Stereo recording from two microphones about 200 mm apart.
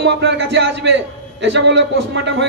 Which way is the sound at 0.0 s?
60° right (ahead or behind).